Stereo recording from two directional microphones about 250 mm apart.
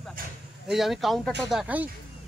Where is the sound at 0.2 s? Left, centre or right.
Right.